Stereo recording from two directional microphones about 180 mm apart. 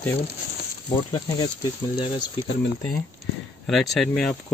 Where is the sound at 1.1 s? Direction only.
20° left (ahead or behind).